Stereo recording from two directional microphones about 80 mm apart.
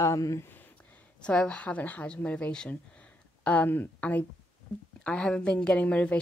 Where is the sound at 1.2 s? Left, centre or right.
Centre.